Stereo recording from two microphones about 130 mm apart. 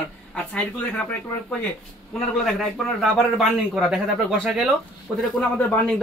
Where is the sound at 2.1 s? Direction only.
5° left (ahead or behind).